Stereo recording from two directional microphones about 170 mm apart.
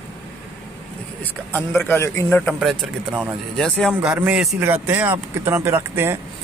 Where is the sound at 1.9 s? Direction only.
15° left (ahead or behind).